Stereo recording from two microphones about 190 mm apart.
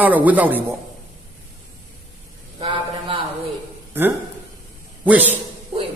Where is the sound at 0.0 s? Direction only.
10° right (ahead or behind).